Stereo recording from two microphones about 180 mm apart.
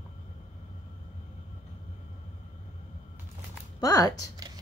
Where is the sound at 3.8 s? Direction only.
20° left (ahead or behind).